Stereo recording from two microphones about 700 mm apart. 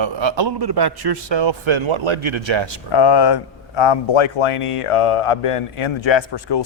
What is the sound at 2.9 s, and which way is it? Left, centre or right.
Speech, left.